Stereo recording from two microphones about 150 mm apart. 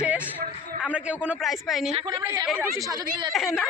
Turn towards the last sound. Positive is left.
turn(degrees=0)  # may be behind; listen again after turning